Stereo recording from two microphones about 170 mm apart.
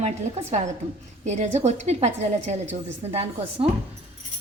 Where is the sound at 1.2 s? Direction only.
40° right (ahead or behind).